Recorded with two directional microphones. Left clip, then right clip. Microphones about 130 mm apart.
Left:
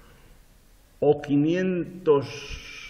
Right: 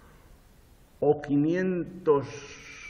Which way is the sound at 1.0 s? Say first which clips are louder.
Left 3 dB; 10° left (ahead or behind).